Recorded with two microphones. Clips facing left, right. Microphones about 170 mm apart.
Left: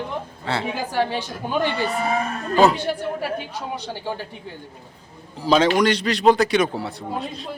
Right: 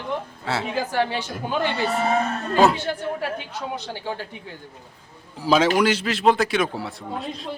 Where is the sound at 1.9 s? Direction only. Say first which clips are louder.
Right 1 dB; 25° right (ahead or behind).